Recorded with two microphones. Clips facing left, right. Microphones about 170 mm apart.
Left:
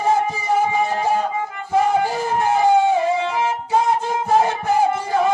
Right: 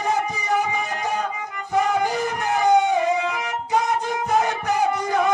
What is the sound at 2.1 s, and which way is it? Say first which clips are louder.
Music: left 4 dB; 30° left (ahead or behind).